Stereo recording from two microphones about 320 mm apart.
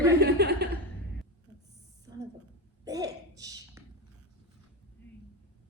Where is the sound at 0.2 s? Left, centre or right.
Right.